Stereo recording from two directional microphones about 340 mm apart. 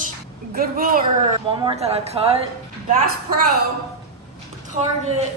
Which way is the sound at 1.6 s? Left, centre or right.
Centre.